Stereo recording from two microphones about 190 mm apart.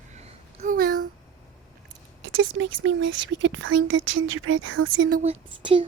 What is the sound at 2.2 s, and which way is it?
Speech, 85° right.